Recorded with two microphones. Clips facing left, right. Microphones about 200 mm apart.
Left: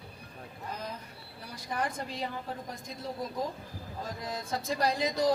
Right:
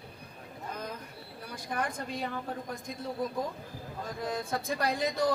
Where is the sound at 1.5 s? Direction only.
55° right (ahead or behind).